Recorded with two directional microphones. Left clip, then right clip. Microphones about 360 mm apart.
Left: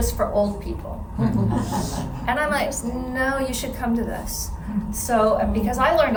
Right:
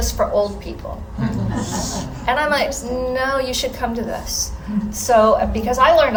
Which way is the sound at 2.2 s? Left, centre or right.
Centre.